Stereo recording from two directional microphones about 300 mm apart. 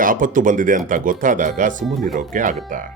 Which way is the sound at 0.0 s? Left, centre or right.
Right.